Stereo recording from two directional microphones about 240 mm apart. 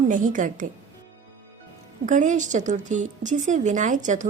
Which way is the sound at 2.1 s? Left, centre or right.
Right.